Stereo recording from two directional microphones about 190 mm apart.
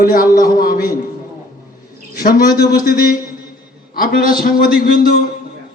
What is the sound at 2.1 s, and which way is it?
A man's voice, 50° left (ahead or behind).